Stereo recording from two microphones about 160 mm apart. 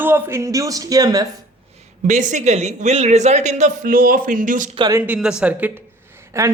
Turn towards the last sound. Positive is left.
turn(degrees=-15)  # may be behind; listen again after turning